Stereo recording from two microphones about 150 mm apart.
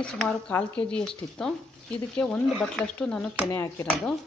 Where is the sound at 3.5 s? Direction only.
20° left (ahead or behind).